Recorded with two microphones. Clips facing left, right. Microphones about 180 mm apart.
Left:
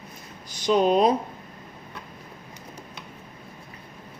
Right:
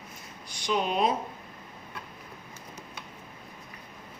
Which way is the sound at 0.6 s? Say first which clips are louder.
Left 8 dB; 35° left (ahead or behind).